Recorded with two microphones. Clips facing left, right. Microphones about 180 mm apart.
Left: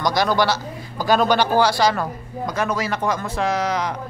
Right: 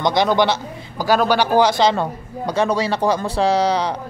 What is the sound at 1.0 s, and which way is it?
A man's voice, 10° right (ahead or behind).